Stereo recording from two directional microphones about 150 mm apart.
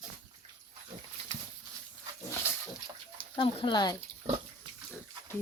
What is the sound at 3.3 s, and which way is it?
Speech, 35° left (ahead or behind).